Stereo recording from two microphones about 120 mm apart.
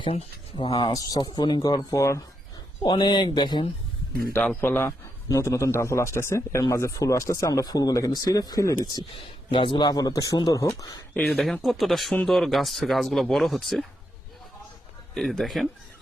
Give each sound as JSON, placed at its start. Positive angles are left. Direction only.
{"t": 0.5, "sound": "speech", "side_deg": 40}
{"t": 2.8, "sound": "speech", "side_deg": 35}
{"t": 4.3, "sound": "a man's voice", "side_deg": 15}
{"t": 5.3, "sound": "speech", "side_deg": 25}
{"t": 9.1, "sound": "speech", "side_deg": 45}
{"t": 11.1, "sound": "a man's voice", "side_deg": 10}
{"t": 15.1, "sound": "speech", "side_deg": 5}